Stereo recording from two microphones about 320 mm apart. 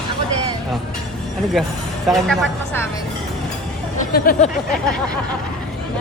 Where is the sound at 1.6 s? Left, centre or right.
Centre.